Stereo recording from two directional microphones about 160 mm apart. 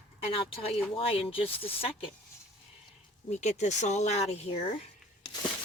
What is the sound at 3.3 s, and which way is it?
Speech, 45° left (ahead or behind).